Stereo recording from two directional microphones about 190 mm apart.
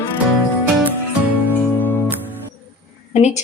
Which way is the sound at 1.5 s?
10° left (ahead or behind).